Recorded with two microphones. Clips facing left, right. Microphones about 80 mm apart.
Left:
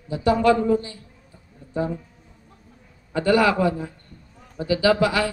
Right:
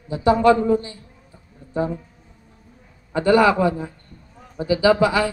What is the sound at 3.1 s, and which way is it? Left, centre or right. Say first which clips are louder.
Speech: right 3 dB; right.